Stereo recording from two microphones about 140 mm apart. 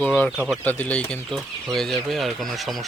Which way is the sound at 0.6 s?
10° left (ahead or behind).